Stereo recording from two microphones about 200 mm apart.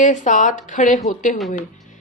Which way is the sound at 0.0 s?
40° left (ahead or behind).